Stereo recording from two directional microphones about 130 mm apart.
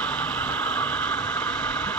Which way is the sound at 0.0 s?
10° left (ahead or behind).